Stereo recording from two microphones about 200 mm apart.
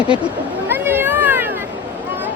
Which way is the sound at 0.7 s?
10° right (ahead or behind).